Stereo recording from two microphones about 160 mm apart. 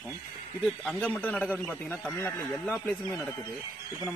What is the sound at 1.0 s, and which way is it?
A man's voice, 10° left (ahead or behind).